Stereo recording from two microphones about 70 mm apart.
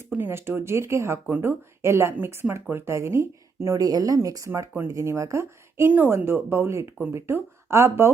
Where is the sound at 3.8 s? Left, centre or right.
Right.